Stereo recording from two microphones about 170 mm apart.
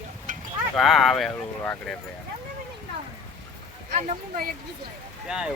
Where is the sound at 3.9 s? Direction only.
40° right (ahead or behind).